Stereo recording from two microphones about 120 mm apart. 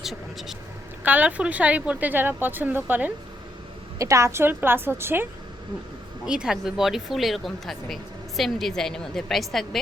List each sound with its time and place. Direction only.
0.0 s speech: centre (ahead or behind)
1.0 s a woman's voice: 15° right (ahead or behind)
3.9 s a woman's voice: 25° right (ahead or behind)
6.2 s speech: 5° right (ahead or behind)